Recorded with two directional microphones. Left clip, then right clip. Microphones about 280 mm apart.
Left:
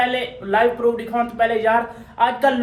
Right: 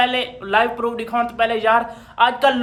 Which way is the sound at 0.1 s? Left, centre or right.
Centre.